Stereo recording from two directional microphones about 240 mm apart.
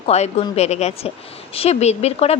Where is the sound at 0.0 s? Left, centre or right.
Left.